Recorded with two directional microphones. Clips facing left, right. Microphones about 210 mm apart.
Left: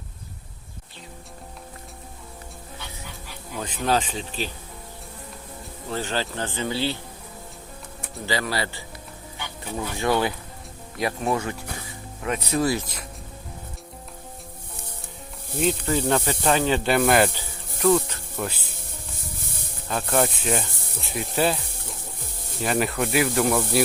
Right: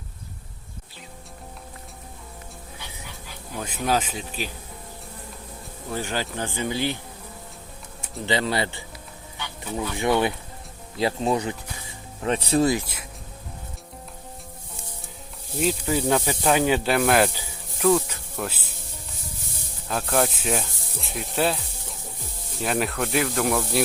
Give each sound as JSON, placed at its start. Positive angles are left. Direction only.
{"t": 3.6, "sound": "speech", "side_deg": -10}
{"t": 5.9, "sound": "speech", "side_deg": -10}
{"t": 8.3, "sound": "speech", "side_deg": -20}
{"t": 11.9, "sound": "music", "side_deg": -30}
{"t": 15.5, "sound": "speech", "side_deg": -5}
{"t": 17.3, "sound": "insect", "side_deg": -5}
{"t": 19.9, "sound": "speech", "side_deg": 0}
{"t": 22.6, "sound": "speech", "side_deg": 0}